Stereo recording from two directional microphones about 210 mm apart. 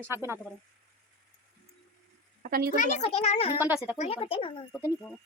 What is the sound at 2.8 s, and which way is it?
Speech, 30° left (ahead or behind).